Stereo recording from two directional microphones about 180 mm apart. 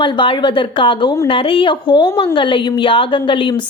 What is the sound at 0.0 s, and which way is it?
Speech, 25° left (ahead or behind).